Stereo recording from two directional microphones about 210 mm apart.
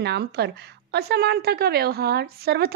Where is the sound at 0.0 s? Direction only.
50° right (ahead or behind).